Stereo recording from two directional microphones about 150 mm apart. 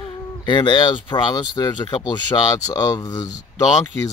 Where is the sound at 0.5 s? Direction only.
30° left (ahead or behind).